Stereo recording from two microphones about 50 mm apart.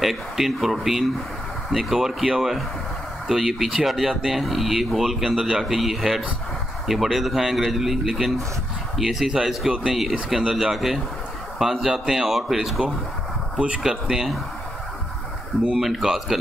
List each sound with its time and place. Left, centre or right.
0.0 s speech: centre
13.6 s speech: right
14.0 s speech: centre
15.8 s speech: centre